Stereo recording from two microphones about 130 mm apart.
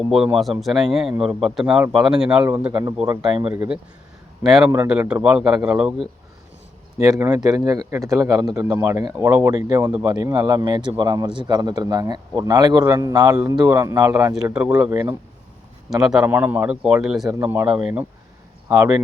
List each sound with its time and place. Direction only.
0.1 s a man's voice: centre (ahead or behind)
7.0 s speech: 25° right (ahead or behind)
14.5 s a man's voice: 10° right (ahead or behind)
14.8 s speech: 25° right (ahead or behind)
16.2 s a man's voice: 15° right (ahead or behind)
17.4 s a man's voice: 15° right (ahead or behind)